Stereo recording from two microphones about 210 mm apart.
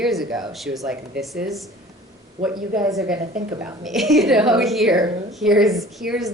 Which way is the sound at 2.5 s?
20° right (ahead or behind).